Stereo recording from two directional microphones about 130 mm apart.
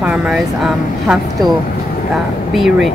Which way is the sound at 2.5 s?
Centre (ahead or behind).